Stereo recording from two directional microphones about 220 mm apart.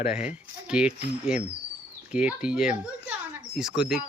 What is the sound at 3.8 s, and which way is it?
Speech, centre (ahead or behind).